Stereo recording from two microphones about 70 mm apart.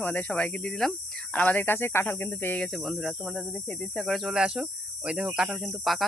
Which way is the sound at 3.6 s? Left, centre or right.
Centre.